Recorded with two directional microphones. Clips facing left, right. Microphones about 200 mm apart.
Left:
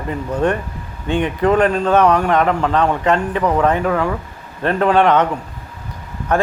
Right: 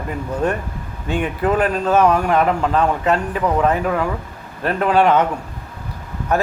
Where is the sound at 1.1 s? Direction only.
5° right (ahead or behind).